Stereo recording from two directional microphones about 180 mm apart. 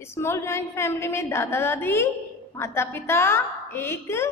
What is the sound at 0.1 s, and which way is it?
Speech, 15° left (ahead or behind).